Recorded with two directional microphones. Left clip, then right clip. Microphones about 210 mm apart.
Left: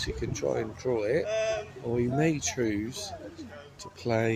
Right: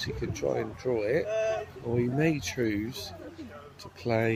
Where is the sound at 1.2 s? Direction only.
50° left (ahead or behind).